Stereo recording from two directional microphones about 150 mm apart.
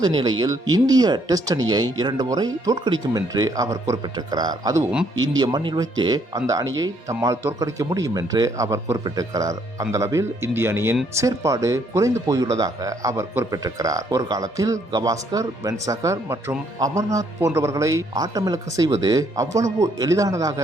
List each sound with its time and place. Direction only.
0.0 s speech: 30° right (ahead or behind)